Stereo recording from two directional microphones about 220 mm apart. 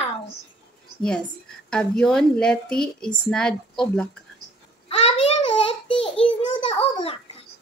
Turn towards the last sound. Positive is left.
turn(degrees=25)  # may be behind; listen again after turning